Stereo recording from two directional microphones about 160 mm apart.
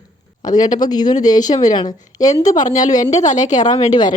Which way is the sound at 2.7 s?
50° left (ahead or behind).